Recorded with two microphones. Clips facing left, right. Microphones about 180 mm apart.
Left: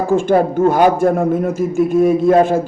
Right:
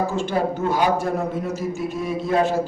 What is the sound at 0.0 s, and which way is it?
A man's voice, 50° left (ahead or behind).